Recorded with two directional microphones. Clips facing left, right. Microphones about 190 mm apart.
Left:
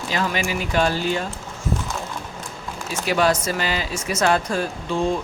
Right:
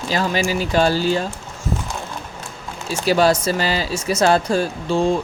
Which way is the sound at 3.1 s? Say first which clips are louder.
Right 4 dB; 30° right (ahead or behind).